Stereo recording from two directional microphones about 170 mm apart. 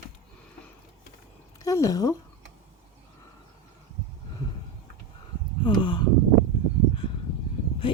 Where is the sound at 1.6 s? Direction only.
20° left (ahead or behind).